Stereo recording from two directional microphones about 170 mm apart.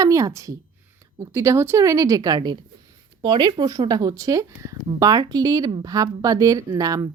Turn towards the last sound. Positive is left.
turn(degrees=-20)  # may be behind; listen again after turning